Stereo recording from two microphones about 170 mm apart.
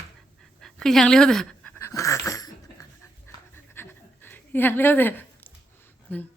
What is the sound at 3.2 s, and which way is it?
Pant, 15° left (ahead or behind).